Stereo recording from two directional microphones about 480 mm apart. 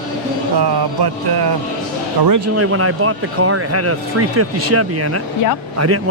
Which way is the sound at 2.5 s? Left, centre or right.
Right.